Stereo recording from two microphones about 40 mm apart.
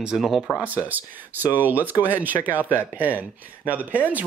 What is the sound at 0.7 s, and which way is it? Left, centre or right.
Speech, right.